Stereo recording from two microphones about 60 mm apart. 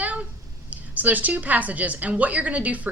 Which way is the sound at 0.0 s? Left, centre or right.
Right.